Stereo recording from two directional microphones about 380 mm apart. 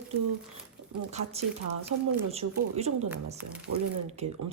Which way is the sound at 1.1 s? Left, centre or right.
Centre.